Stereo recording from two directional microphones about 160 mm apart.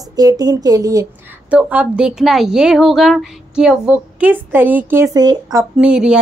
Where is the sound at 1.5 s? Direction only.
10° right (ahead or behind).